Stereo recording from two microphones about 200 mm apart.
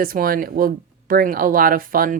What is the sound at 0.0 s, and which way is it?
Speech, 45° right (ahead or behind).